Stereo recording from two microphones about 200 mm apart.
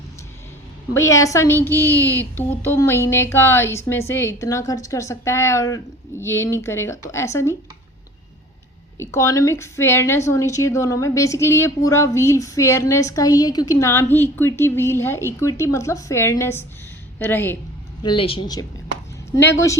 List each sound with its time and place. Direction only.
0.9 s a woman's voice: 15° left (ahead or behind)
9.0 s a woman's voice: 15° left (ahead or behind)
18.0 s speech: 25° left (ahead or behind)